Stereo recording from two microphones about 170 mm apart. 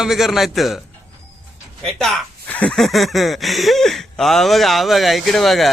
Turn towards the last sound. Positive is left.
turn(degrees=0)  # may be behind; listen again after turning